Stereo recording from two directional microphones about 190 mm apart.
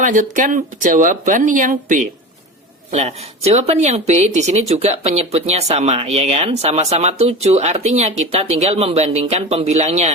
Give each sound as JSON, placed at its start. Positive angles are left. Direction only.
{"t": 0.0, "sound": "speech", "side_deg": -45}